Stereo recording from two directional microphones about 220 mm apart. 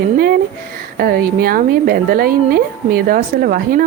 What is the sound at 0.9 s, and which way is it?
A woman's voice, 40° right (ahead or behind).